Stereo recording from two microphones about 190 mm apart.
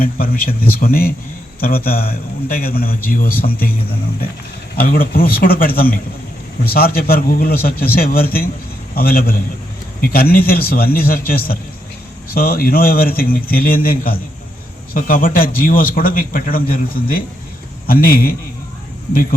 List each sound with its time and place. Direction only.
0.0 s a man's voice: 50° left (ahead or behind)
4.8 s a man's voice: 50° left (ahead or behind)
14.9 s a man's voice: 50° left (ahead or behind)